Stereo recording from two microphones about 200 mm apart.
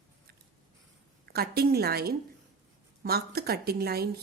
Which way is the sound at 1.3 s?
50° right (ahead or behind).